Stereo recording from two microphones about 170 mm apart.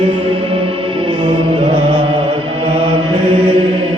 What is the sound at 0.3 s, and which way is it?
Music, 30° right (ahead or behind).